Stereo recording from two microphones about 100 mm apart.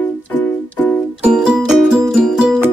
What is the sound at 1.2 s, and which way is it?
Music, 10° right (ahead or behind).